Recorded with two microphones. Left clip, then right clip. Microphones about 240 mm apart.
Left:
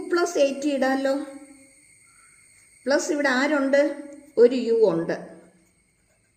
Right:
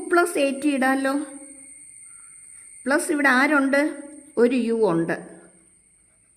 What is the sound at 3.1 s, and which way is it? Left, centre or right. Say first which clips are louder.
A woman's voice: right 4 dB; right.